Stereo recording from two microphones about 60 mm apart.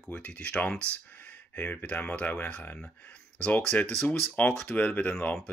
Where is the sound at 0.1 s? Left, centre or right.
Left.